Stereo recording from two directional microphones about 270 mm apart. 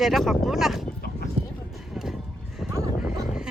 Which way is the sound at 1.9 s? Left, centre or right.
Centre.